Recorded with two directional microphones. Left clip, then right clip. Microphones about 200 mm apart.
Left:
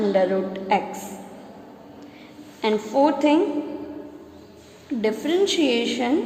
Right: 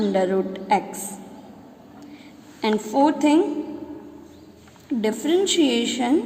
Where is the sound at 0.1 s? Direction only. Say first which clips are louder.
Left 1 dB; 30° right (ahead or behind).